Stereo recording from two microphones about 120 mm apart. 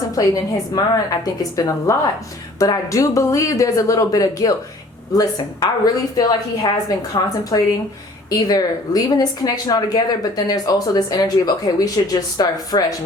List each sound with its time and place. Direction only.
0.2 s speech: 30° left (ahead or behind)